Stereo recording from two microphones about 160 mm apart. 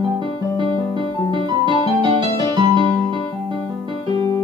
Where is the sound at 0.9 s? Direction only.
30° right (ahead or behind).